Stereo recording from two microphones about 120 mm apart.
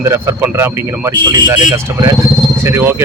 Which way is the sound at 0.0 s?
20° right (ahead or behind).